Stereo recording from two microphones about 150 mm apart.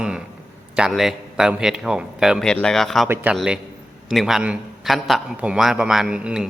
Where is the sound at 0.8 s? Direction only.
Centre (ahead or behind).